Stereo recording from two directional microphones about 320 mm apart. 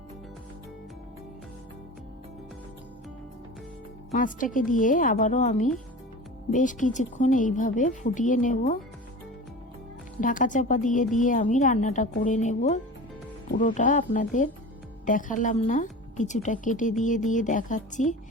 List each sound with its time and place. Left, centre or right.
4.1 s speech: left
10.2 s speech: left